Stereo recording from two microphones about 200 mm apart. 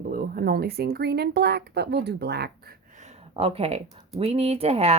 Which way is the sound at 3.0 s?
30° right (ahead or behind).